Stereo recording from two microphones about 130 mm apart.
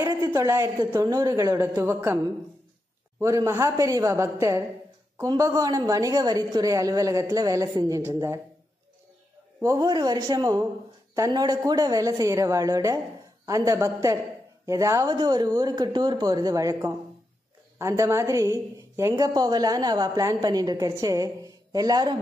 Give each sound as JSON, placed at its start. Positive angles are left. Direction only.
{"t": 0.0, "sound": "a woman's voice", "side_deg": -30}
{"t": 3.2, "sound": "a woman's voice", "side_deg": -25}
{"t": 9.6, "sound": "a woman's voice", "side_deg": -25}